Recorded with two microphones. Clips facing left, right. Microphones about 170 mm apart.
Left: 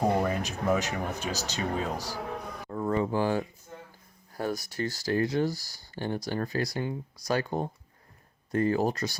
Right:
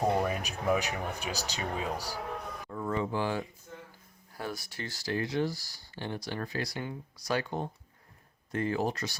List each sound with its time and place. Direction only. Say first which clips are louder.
0.2 s speech: left 3 dB; 10° right (ahead or behind)
2.6 s speech: left 5 dB; 40° left (ahead or behind)